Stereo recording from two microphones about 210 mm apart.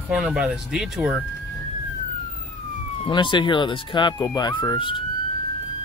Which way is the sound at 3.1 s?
20° left (ahead or behind).